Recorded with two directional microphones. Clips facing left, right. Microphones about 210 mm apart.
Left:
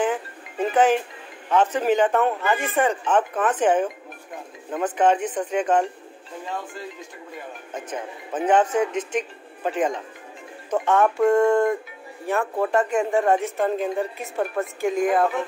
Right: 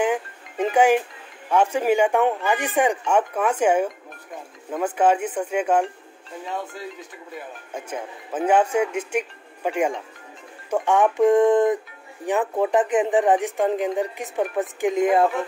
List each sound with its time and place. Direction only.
0.0 s music: 15° right (ahead or behind)
1.5 s speech: 10° right (ahead or behind)
7.7 s speech: 10° right (ahead or behind)